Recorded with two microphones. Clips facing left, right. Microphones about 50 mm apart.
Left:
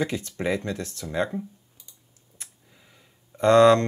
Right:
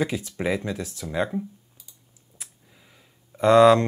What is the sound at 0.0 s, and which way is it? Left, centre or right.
Speech, centre.